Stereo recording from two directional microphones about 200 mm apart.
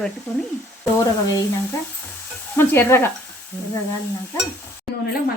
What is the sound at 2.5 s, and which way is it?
Speech, 10° left (ahead or behind).